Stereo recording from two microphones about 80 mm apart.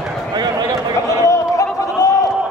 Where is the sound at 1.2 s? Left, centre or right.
Left.